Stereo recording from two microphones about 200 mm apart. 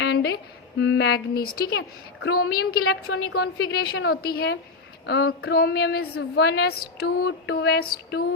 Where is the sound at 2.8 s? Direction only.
75° left (ahead or behind).